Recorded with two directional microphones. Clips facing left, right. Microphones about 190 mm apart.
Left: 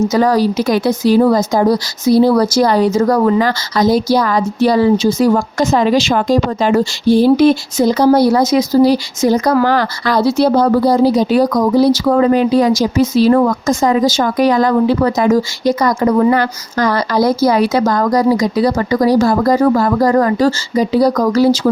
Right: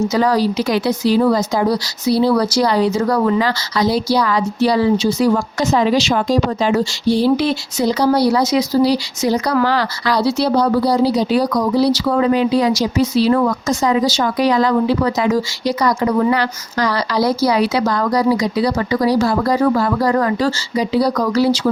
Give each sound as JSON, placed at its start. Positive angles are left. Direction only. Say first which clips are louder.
{"t": 0.1, "sound": "speech", "louder": "left 3 dB", "side_deg": 45}